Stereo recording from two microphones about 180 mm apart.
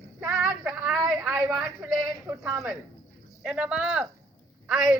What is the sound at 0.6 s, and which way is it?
A man's voice, 10° right (ahead or behind).